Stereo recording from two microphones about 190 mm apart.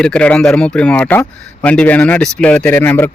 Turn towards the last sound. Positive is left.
turn(degrees=10)  # may be behind; listen again after turning